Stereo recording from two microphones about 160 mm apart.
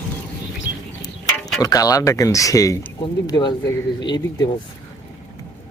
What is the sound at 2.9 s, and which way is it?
Speech, 25° left (ahead or behind).